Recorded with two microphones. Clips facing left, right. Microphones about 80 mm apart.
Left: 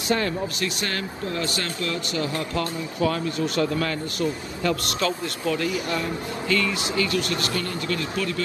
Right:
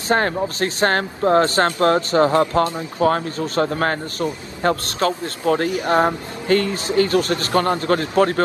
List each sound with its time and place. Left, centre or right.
0.1 s speech: right